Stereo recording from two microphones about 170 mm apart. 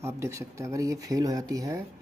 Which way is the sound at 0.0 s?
15° right (ahead or behind).